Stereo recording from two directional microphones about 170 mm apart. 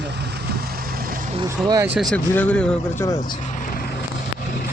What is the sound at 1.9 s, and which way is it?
Speech, 5° left (ahead or behind).